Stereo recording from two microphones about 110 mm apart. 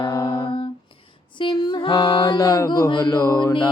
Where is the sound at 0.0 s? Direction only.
45° left (ahead or behind).